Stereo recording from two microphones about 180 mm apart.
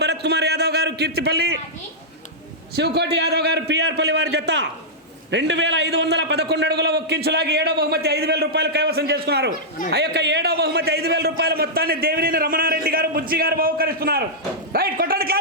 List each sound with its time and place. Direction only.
0.0 s a man's voice: 65° right (ahead or behind)
2.7 s a man's voice: 65° right (ahead or behind)